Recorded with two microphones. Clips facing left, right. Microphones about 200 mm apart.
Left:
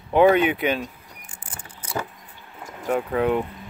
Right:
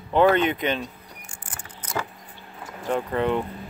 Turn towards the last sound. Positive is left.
turn(degrees=5)  # may be behind; listen again after turning